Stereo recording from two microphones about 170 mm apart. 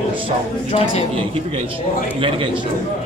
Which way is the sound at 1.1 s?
35° right (ahead or behind).